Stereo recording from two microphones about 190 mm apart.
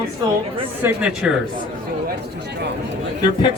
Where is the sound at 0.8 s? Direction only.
10° right (ahead or behind).